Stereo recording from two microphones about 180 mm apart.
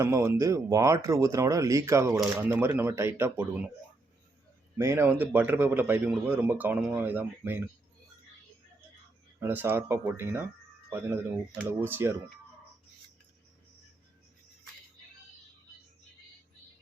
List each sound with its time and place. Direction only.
0.0 s speech: 15° right (ahead or behind)
4.8 s speech: 15° right (ahead or behind)
9.4 s speech: 10° right (ahead or behind)